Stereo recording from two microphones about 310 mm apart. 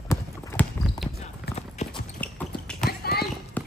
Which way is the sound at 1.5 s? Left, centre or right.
Centre.